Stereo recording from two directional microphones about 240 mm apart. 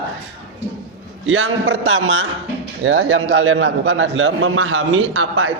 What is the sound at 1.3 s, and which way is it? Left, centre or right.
A man's voice, right.